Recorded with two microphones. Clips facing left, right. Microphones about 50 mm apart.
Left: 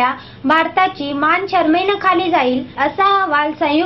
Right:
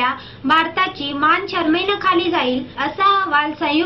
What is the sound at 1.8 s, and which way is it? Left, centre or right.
Speech, left.